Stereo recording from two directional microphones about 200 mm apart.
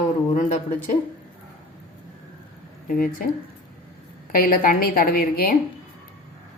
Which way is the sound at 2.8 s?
45° left (ahead or behind).